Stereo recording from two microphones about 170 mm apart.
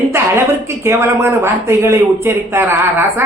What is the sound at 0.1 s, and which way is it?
Speech, 15° right (ahead or behind).